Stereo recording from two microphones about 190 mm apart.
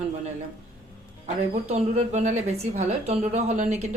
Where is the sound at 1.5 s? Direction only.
35° right (ahead or behind).